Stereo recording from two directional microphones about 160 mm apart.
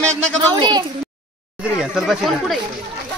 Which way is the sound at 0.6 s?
30° right (ahead or behind).